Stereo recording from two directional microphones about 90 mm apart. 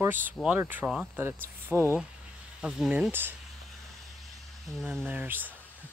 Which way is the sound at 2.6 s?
10° right (ahead or behind).